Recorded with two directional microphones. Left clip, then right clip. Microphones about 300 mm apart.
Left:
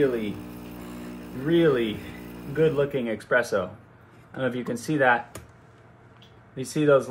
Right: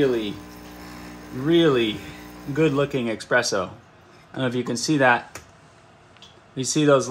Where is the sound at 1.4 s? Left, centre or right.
Right.